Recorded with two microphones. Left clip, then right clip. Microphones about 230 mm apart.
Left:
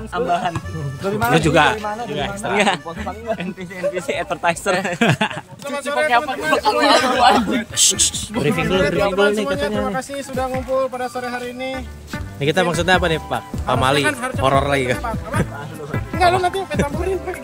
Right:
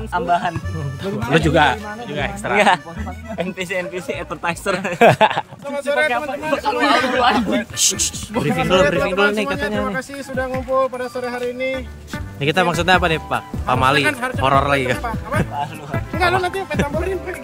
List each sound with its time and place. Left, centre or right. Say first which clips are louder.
0.1 s a man's voice: right 1 dB; centre
4.1 s a man's voice: left 4 dB; centre
4.9 s speech: right 7 dB; right
5.7 s a man's voice: right 1 dB; centre
5.9 s a man's voice: left 4 dB; left
7.3 s speech: left 1 dB; centre
8.6 s a man's voice: right 4 dB; centre